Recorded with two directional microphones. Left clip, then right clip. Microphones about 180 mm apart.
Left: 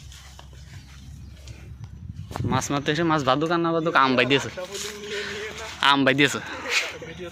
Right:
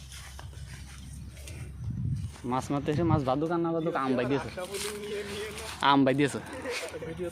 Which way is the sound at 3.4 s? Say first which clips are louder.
Left 6 dB; 25° left (ahead or behind).